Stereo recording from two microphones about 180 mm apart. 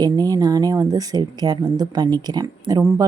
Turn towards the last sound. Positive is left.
turn(degrees=-20)  # may be behind; listen again after turning